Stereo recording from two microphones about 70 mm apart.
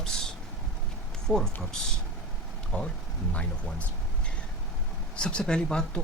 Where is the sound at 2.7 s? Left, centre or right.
Centre.